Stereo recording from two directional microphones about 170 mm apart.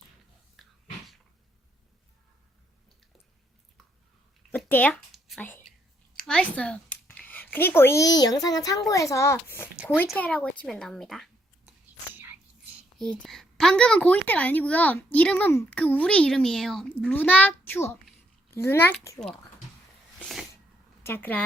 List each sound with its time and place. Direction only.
4.7 s a woman's voice: 10° left (ahead or behind)
6.1 s a sound: 5° left (ahead or behind)
8.2 s a child's voice: 20° left (ahead or behind)
9.7 s a sound: 5° right (ahead or behind)
10.2 s a woman's voice: 5° left (ahead or behind)
12.1 s whispering: 10° right (ahead or behind)
13.0 s a child's voice: centre (ahead or behind)
20.1 s a sound: centre (ahead or behind)
21.0 s speech: 10° left (ahead or behind)